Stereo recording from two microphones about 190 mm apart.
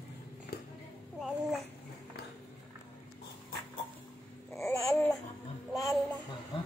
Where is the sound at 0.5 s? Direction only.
55° left (ahead or behind).